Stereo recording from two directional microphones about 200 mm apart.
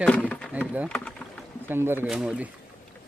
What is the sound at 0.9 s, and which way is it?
Rowboat, 5° left (ahead or behind).